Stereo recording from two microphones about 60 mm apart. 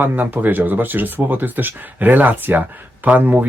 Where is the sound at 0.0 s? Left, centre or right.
Right.